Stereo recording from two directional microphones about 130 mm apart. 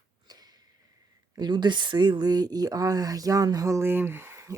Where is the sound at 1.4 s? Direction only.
35° right (ahead or behind).